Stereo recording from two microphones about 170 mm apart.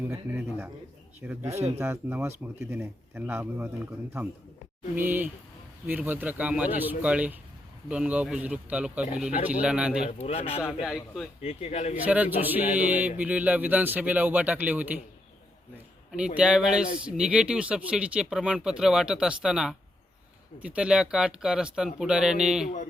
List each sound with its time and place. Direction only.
0.3 s speech: 10° right (ahead or behind)
4.9 s speech: 10° right (ahead or behind)
10.1 s a man's voice: 35° left (ahead or behind)
10.7 s speech: centre (ahead or behind)
11.4 s a man's voice: 40° left (ahead or behind)
12.0 s speech: 10° right (ahead or behind)
16.1 s speech: 5° right (ahead or behind)